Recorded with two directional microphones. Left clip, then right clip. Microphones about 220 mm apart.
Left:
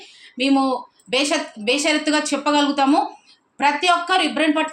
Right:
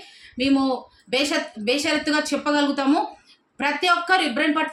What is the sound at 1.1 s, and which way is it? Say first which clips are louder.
A woman's voice: left 2 dB; 20° right (ahead or behind).